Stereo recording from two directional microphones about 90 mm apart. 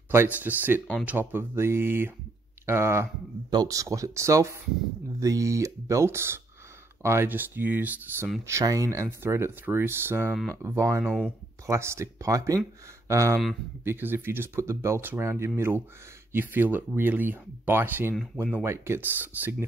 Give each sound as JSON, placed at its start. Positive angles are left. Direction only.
{"t": 0.1, "sound": "speech", "side_deg": -25}
{"t": 3.4, "sound": "speech", "side_deg": -45}
{"t": 8.5, "sound": "speech", "side_deg": -35}
{"t": 11.1, "sound": "speech", "side_deg": 10}
{"t": 11.6, "sound": "speech", "side_deg": -35}
{"t": 18.1, "sound": "speech", "side_deg": -5}
{"t": 18.6, "sound": "speech", "side_deg": -25}